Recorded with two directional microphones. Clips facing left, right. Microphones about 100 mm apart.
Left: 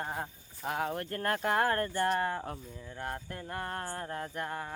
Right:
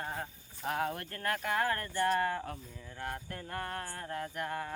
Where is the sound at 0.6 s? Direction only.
5° left (ahead or behind).